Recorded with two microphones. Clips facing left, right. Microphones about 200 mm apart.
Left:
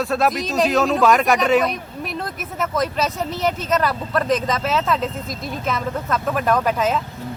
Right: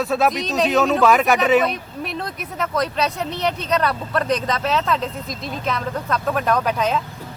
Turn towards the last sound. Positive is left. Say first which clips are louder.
# left 1 dB
turn(degrees=5)  # may be behind; listen again after turning